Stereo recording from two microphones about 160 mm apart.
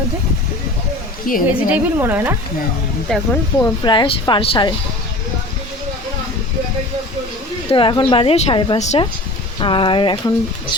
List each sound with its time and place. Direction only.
1.5 s a woman's voice: 10° right (ahead or behind)
3.1 s speech: 5° left (ahead or behind)
3.6 s speech: 30° left (ahead or behind)
7.7 s a woman's voice: 30° left (ahead or behind)